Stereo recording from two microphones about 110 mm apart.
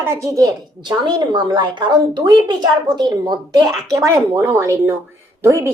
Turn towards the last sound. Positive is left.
turn(degrees=-25)  # may be behind; listen again after turning